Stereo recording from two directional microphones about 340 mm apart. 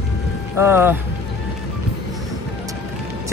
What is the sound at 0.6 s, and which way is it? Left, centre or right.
Speech, centre.